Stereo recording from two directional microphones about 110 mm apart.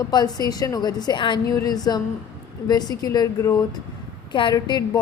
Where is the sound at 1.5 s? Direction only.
35° left (ahead or behind).